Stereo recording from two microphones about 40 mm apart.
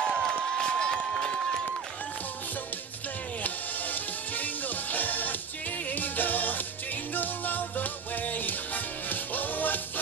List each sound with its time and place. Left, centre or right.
0.0 s a sound: centre
1.4 s run: centre
3.4 s music: left